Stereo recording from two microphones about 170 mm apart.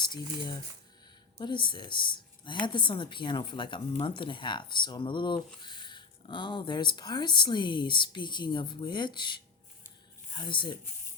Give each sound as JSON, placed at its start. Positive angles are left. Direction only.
{"t": 0.0, "sound": "speech", "side_deg": 25}